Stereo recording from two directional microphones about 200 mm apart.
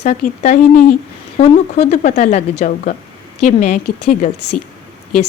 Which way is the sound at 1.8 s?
35° left (ahead or behind).